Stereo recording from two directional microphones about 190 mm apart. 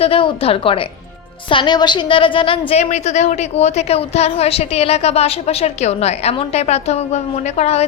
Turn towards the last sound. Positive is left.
turn(degrees=35)  # may be behind; listen again after turning